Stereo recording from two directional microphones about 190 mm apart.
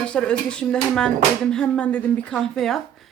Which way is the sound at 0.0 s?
5° left (ahead or behind).